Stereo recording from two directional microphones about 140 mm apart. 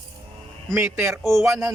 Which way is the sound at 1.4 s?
20° right (ahead or behind).